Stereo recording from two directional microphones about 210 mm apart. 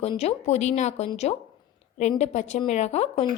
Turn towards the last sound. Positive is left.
turn(degrees=30)  # may be behind; listen again after turning